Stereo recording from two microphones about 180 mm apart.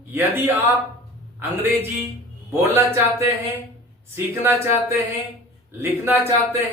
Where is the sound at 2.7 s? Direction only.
15° right (ahead or behind).